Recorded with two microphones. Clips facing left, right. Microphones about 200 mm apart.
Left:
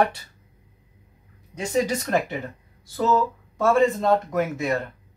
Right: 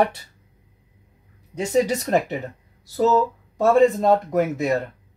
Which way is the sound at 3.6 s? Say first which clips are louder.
Right 3 dB; 35° right (ahead or behind).